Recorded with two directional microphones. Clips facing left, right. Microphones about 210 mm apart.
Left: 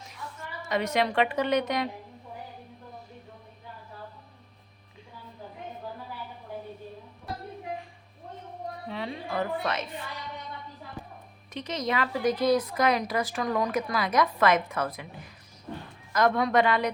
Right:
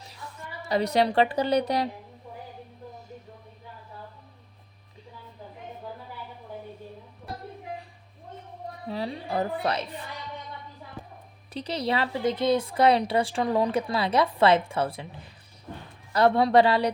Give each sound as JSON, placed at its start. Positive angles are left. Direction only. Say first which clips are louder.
{"t": 0.6, "sound": "a woman's voice", "louder": "right 3 dB", "side_deg": -35}
{"t": 8.9, "sound": "a woman's voice", "louder": "right 4 dB", "side_deg": -35}
{"t": 11.5, "sound": "speech", "louder": "right 2 dB", "side_deg": -35}
{"t": 16.1, "sound": "a woman's voice", "louder": "right 4 dB", "side_deg": -30}